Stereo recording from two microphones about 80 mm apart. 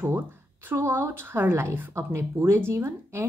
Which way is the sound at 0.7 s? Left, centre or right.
Right.